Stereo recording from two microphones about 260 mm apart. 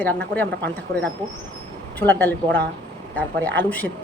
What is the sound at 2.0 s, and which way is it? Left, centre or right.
Speech, centre.